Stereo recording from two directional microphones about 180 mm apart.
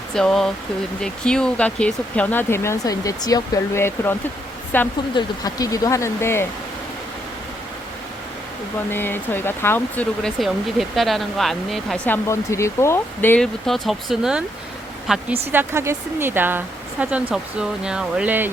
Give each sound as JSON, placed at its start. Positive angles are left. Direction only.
{"t": 0.1, "sound": "speech", "side_deg": 0}
{"t": 5.1, "sound": "speech", "side_deg": 20}
{"t": 8.9, "sound": "speech", "side_deg": 10}